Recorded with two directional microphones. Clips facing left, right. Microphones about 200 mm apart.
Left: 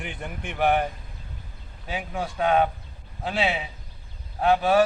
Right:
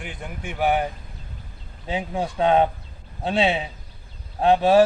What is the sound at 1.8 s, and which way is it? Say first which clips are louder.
A man's voice: right 4 dB; 25° right (ahead or behind).